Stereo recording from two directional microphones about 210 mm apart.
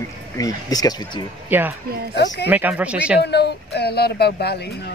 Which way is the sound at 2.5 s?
5° right (ahead or behind).